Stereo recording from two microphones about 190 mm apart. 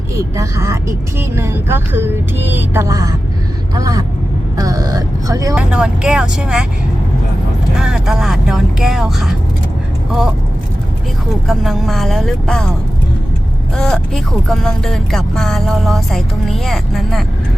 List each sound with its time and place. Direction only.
0.3 s speech: 15° right (ahead or behind)
5.5 s speech: 5° right (ahead or behind)
7.8 s speech: 5° right (ahead or behind)
11.4 s speech: centre (ahead or behind)
13.7 s speech: centre (ahead or behind)